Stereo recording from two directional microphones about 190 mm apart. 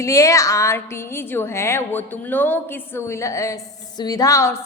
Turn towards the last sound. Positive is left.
turn(degrees=15)  # may be behind; listen again after turning